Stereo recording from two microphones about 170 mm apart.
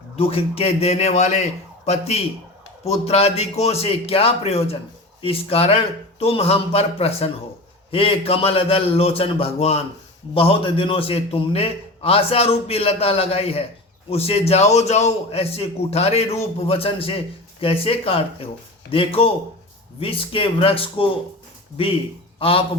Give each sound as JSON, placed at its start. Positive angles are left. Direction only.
{"t": 0.2, "sound": "a man's voice", "side_deg": 35}
{"t": 22.4, "sound": "speech", "side_deg": 35}